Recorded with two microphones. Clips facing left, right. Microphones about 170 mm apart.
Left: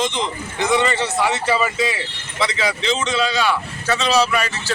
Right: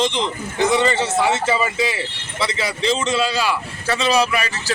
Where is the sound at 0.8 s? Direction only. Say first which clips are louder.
Right 1 dB; 35° right (ahead or behind).